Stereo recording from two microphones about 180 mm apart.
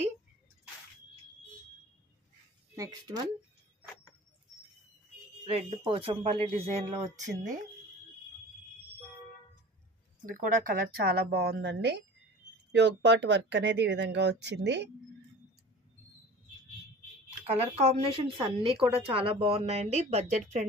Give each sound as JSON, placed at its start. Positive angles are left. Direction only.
{"t": 2.7, "sound": "speech", "side_deg": -20}
{"t": 5.5, "sound": "speech", "side_deg": -30}
{"t": 10.3, "sound": "a woman's voice", "side_deg": -50}
{"t": 17.7, "sound": "speech", "side_deg": -30}